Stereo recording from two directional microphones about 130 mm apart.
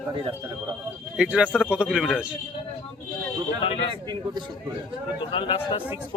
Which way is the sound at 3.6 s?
45° left (ahead or behind).